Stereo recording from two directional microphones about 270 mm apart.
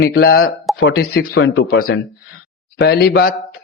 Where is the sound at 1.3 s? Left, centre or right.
Left.